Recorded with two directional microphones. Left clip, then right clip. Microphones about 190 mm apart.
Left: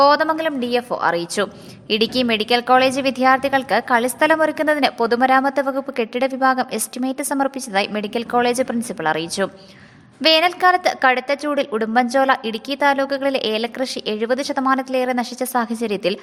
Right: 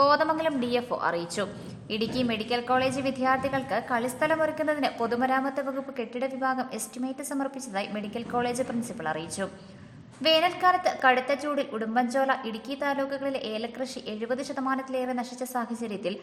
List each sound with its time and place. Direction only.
0.0 s a woman's voice: 30° left (ahead or behind)